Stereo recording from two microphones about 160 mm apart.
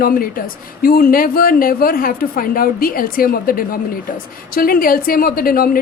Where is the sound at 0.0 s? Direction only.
65° left (ahead or behind).